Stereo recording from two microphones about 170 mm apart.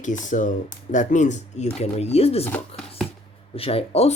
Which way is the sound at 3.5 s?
35° left (ahead or behind).